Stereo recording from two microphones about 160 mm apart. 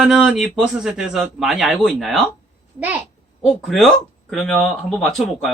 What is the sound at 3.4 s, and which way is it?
Speech, centre (ahead or behind).